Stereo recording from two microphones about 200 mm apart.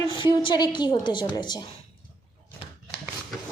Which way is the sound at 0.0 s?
25° left (ahead or behind).